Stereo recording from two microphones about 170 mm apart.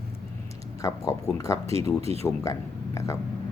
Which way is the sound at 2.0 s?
35° right (ahead or behind).